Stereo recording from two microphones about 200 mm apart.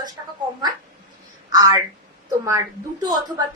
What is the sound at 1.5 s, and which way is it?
Speech, 20° right (ahead or behind).